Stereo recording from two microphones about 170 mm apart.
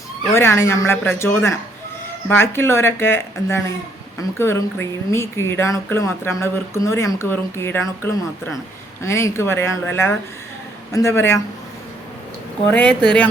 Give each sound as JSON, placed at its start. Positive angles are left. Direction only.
{"t": 0.3, "sound": "speech", "side_deg": 15}
{"t": 12.7, "sound": "speech", "side_deg": 5}